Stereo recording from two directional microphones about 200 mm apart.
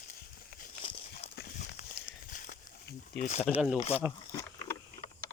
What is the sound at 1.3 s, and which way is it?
Horse, 50° left (ahead or behind).